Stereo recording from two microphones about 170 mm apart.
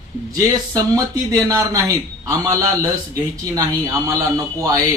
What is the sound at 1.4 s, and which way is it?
Speech, 20° right (ahead or behind).